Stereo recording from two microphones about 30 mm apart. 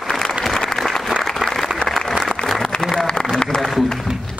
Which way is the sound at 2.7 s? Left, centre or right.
Left.